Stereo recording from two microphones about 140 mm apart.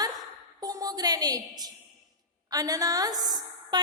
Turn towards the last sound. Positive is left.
turn(degrees=-30)  # may be behind; listen again after turning